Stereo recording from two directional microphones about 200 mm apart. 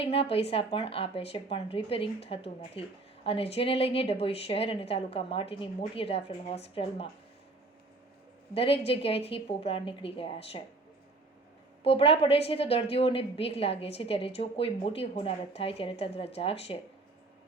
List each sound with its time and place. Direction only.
0.0 s a woman's voice: 30° left (ahead or behind)
8.5 s a woman's voice: 30° left (ahead or behind)
11.8 s a woman's voice: 30° left (ahead or behind)